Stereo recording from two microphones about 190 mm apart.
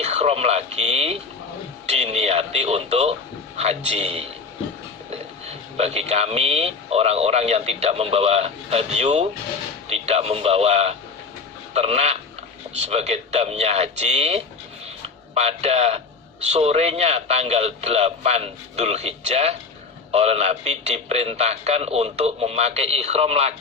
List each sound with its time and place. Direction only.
0.0 s radio: 35° right (ahead or behind)
1.9 s speech: 35° right (ahead or behind)
15.0 s a sound: 35° right (ahead or behind)
16.5 s speech: 35° right (ahead or behind)